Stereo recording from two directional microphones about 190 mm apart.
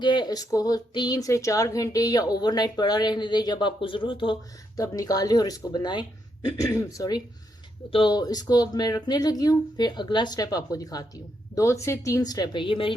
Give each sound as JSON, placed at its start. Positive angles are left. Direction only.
{"t": 0.0, "sound": "speech", "side_deg": 25}